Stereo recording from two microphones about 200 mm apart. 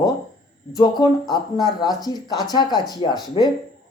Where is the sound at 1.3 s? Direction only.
20° left (ahead or behind).